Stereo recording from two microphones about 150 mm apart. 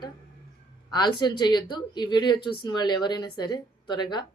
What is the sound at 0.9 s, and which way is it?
A woman's voice, 30° left (ahead or behind).